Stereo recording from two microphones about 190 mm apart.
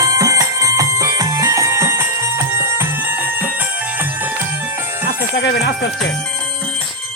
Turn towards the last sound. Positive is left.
turn(degrees=65)  # may be behind; listen again after turning